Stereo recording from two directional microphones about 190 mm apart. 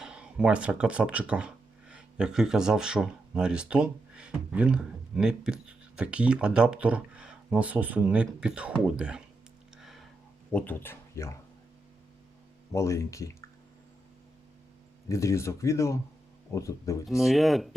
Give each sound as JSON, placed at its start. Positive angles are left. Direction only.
{"t": 0.0, "sound": "speech", "side_deg": -5}
{"t": 9.7, "sound": "a sound", "side_deg": 0}
{"t": 10.5, "sound": "speech", "side_deg": 10}
{"t": 12.7, "sound": "speech", "side_deg": 15}
{"t": 15.1, "sound": "speech", "side_deg": 15}
{"t": 17.1, "sound": "speech", "side_deg": 0}